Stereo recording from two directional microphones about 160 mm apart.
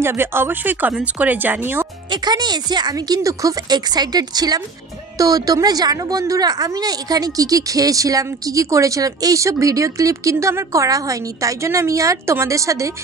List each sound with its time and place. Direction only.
0.0 s speech: 15° right (ahead or behind)
2.0 s a woman's voice: 25° right (ahead or behind)